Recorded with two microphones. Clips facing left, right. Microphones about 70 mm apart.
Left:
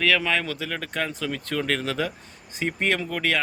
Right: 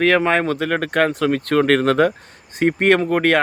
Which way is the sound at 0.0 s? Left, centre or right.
Right.